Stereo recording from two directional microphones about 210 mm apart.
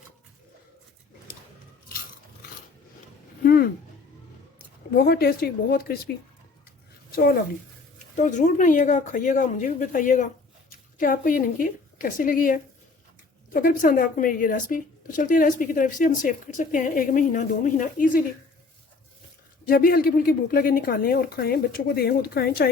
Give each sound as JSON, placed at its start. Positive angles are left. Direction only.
{"t": 3.4, "sound": "a sound", "side_deg": 45}
{"t": 4.5, "sound": "speech", "side_deg": 45}
{"t": 7.2, "sound": "a woman's voice", "side_deg": 45}
{"t": 8.1, "sound": "speech", "side_deg": 35}
{"t": 19.6, "sound": "a woman's voice", "side_deg": 45}